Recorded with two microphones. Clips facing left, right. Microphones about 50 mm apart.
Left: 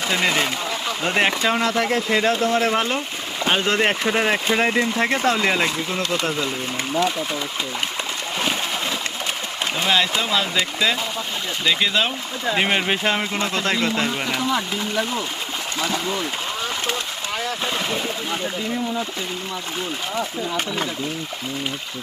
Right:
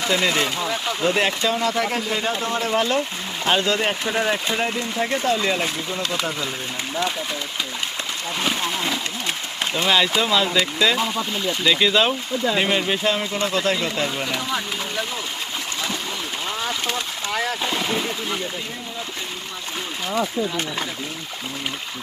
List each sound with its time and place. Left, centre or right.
0.1 s speech: left
1.0 s speech: left
1.5 s speech: left
2.1 s speech: left
3.6 s speech: left
9.7 s speech: centre
12.5 s speech: left